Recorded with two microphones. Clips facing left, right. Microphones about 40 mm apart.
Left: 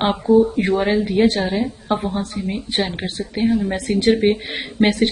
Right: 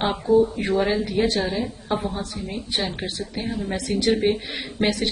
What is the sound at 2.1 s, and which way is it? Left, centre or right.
Speech, left.